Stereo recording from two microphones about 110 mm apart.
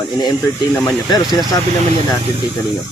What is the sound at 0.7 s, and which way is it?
Speech, 20° left (ahead or behind).